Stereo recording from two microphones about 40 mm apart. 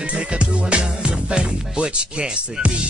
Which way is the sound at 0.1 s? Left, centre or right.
Right.